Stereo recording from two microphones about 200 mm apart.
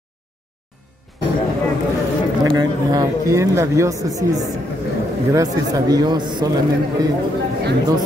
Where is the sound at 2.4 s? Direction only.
20° right (ahead or behind).